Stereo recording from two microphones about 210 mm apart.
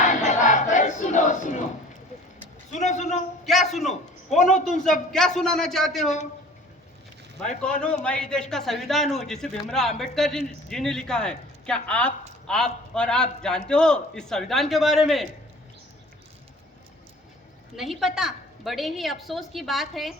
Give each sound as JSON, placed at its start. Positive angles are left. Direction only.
{"t": 0.0, "sound": "battle cry", "side_deg": 35}
{"t": 2.7, "sound": "a sound", "side_deg": 35}
{"t": 3.4, "sound": "a sound", "side_deg": 0}
{"t": 4.8, "sound": "a man's voice", "side_deg": 0}
{"t": 7.6, "sound": "a man's voice", "side_deg": 5}
{"t": 17.7, "sound": "a man's voice", "side_deg": 0}